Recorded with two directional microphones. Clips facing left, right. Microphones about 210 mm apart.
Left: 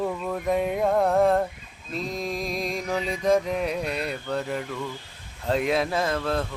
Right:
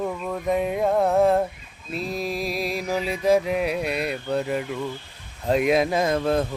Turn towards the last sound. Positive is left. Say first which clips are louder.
# right 4 dB
turn(degrees=-15)  # may be behind; listen again after turning